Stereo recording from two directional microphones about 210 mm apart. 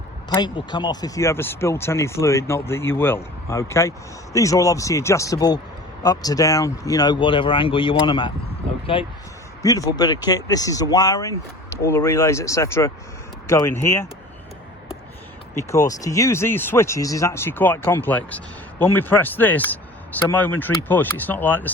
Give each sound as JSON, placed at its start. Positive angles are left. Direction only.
{"t": 0.3, "sound": "speech", "side_deg": 20}
{"t": 15.5, "sound": "speech", "side_deg": 15}